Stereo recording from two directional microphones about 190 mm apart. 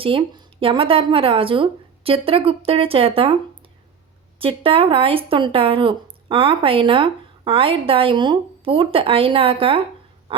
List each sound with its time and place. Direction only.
0.0 s speech: 25° right (ahead or behind)
4.4 s speech: 30° right (ahead or behind)